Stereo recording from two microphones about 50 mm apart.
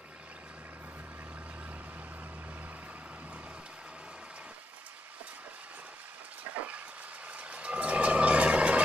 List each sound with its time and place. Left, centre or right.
6.6 s vehicle: right